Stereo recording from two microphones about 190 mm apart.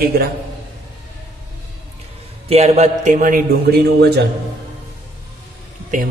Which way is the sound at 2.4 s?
35° right (ahead or behind).